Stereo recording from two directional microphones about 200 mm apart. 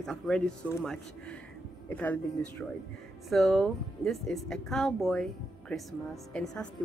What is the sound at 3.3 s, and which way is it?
Speech, centre (ahead or behind).